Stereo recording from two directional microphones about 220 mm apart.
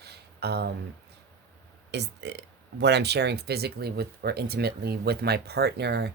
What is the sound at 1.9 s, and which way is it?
Speech, 50° right (ahead or behind).